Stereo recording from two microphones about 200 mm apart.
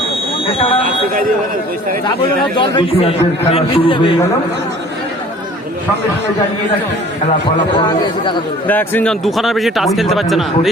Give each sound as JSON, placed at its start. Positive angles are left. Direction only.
{"t": 2.6, "sound": "a man's voice", "side_deg": 25}
{"t": 7.8, "sound": "a man's voice", "side_deg": 20}
{"t": 8.6, "sound": "speech", "side_deg": 10}